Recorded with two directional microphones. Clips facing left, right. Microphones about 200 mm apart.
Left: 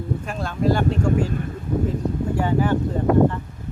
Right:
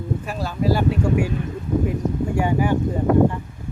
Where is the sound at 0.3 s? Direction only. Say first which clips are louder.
Left 1 dB; 5° right (ahead or behind).